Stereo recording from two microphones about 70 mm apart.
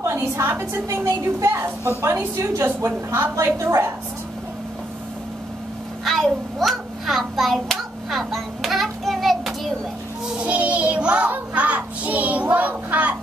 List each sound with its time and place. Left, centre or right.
0.0 s a sound: right
0.8 s a woman's voice: right
1.4 s a woman's voice: right
6.0 s hands: centre
10.4 s child singing: right